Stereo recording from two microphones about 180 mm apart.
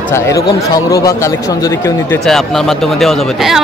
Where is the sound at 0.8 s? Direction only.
15° left (ahead or behind).